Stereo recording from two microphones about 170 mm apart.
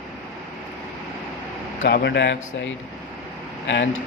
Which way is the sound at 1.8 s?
75° left (ahead or behind).